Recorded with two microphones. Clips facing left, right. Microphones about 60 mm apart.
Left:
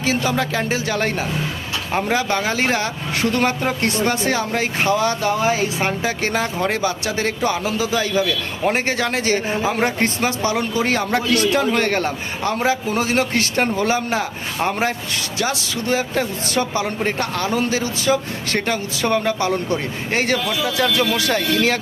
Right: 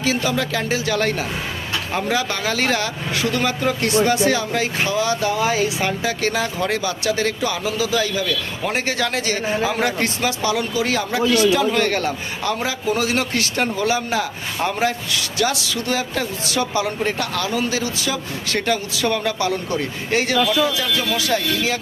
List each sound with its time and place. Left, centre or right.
0.0 s a man's voice: left
3.2 s a man's voice: left
20.7 s speech: left